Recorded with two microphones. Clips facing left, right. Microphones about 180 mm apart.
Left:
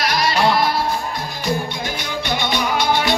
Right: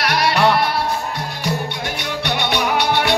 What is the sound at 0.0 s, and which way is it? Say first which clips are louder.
Music: right 1 dB; 65° right (ahead or behind).